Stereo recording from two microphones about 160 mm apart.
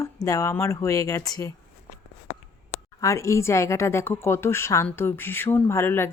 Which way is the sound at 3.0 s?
20° left (ahead or behind).